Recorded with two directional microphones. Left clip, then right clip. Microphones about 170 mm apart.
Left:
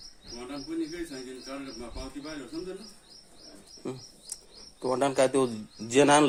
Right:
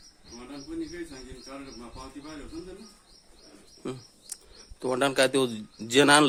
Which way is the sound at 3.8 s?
30° right (ahead or behind).